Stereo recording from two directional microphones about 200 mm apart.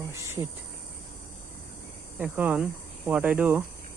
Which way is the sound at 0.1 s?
15° right (ahead or behind).